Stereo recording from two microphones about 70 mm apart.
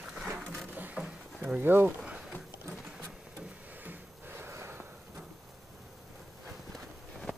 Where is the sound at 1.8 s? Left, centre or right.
Centre.